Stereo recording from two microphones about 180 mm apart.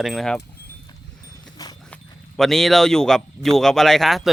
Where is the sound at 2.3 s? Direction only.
Centre (ahead or behind).